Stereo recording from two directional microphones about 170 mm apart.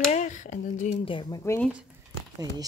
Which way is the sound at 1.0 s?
30° left (ahead or behind).